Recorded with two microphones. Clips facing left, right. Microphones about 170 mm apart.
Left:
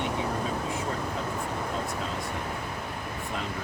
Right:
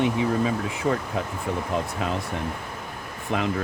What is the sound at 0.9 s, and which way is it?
Speech, 75° right (ahead or behind).